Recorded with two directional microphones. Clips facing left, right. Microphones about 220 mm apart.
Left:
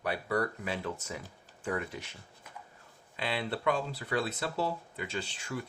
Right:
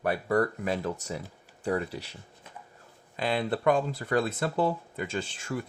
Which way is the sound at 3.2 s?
45° right (ahead or behind).